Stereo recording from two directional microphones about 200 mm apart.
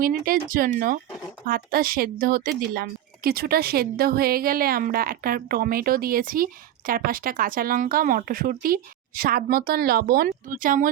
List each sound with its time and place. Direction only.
0.0 s a woman's voice: 45° right (ahead or behind)